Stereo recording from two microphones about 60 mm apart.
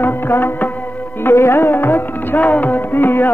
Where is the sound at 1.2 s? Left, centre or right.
Left.